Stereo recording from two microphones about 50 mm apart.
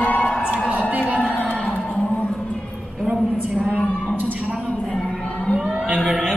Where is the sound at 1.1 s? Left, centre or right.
Left.